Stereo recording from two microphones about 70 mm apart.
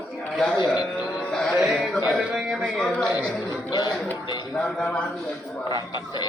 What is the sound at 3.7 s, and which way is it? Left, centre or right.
Speech, left.